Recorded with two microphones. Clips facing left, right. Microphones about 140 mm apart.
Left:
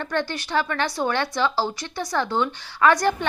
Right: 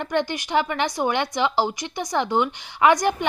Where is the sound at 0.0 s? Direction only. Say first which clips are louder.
Right 2 dB; 15° right (ahead or behind).